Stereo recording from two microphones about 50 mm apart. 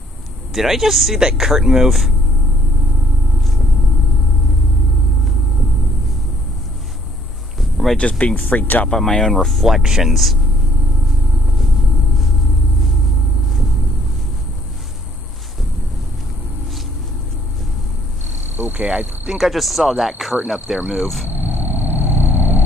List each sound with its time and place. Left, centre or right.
0.5 s speech: centre
7.7 s a sound: centre
8.0 s speech: left
8.4 s speech: left
8.9 s speech: centre
18.6 s cricket: right
19.3 s speech: centre
21.3 s vehicle: right